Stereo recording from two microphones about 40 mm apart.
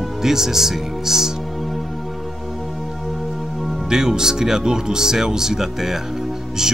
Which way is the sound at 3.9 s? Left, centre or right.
Centre.